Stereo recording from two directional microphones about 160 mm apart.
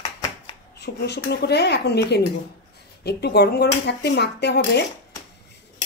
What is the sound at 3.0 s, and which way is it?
Speech, 90° left.